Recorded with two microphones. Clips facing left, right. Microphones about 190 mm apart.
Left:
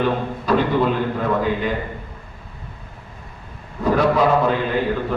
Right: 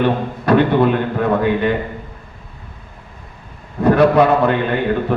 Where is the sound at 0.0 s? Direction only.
70° right (ahead or behind).